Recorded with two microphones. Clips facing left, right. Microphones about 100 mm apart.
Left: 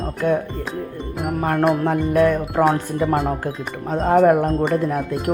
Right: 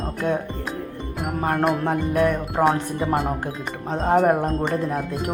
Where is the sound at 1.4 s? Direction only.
30° right (ahead or behind).